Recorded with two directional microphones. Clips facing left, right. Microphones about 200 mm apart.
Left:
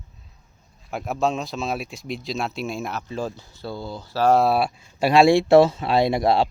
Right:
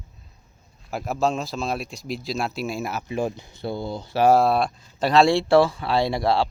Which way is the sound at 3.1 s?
15° right (ahead or behind).